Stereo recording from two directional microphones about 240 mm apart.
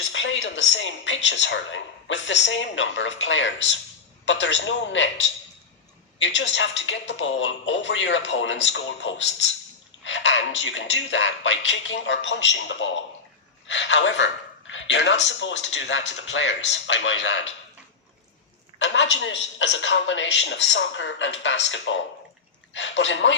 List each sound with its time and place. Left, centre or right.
0.0 s speech: left
18.8 s a man's voice: left